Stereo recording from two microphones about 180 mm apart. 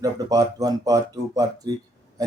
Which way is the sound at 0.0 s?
20° right (ahead or behind).